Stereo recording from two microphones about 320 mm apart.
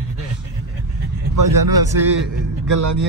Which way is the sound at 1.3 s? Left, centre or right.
Right.